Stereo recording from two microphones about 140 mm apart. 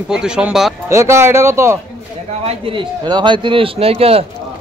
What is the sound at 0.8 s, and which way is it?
Speech, 20° right (ahead or behind).